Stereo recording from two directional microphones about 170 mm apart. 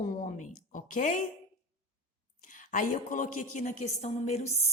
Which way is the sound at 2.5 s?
50° left (ahead or behind).